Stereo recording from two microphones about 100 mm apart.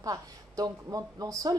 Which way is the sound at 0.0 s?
35° right (ahead or behind).